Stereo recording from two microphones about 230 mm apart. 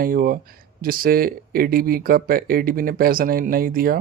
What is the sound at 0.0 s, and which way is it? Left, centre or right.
Speech, right.